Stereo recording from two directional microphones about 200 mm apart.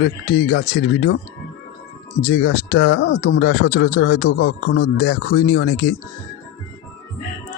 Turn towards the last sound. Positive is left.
turn(degrees=50)  # may be behind; listen again after turning